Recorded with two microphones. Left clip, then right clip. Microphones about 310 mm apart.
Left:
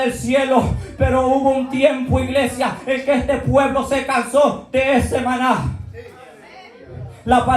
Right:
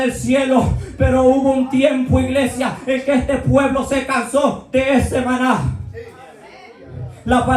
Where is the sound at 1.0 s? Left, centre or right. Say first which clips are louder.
Right 2 dB; left.